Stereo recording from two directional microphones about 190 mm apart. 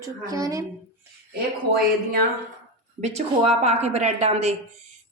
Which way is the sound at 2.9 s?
35° right (ahead or behind).